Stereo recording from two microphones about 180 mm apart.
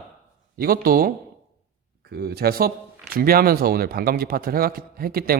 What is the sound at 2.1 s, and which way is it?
Speech, 60° right (ahead or behind).